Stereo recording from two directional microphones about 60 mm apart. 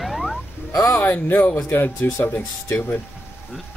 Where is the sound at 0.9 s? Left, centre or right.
Left.